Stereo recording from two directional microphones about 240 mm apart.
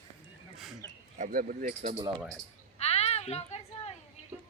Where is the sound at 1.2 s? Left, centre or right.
Right.